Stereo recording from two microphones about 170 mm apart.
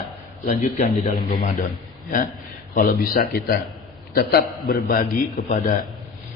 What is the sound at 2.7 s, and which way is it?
A man's voice, 55° left (ahead or behind).